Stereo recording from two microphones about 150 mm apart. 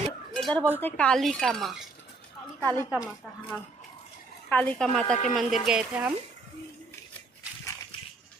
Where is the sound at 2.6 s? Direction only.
15° left (ahead or behind).